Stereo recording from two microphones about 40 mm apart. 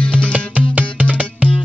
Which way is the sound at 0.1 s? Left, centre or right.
Right.